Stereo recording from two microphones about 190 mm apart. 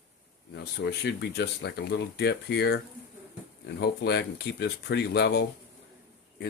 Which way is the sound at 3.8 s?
60° left (ahead or behind).